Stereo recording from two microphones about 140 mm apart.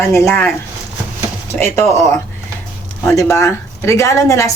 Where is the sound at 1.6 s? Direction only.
20° left (ahead or behind).